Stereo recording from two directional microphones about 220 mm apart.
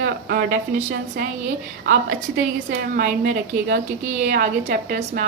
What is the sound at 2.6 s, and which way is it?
Speech, 45° right (ahead or behind).